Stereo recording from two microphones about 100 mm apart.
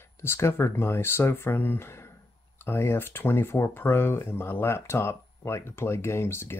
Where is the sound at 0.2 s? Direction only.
25° left (ahead or behind).